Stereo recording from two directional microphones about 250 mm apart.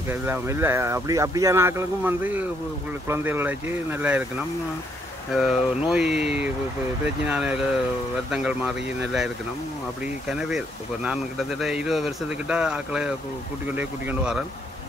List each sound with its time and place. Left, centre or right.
0.1 s speech: centre
5.3 s speech: centre
6.1 s speech: right
7.2 s speech: centre